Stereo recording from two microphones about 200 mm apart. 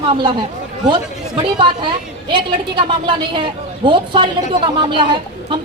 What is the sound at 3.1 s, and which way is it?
A woman's voice, 25° right (ahead or behind).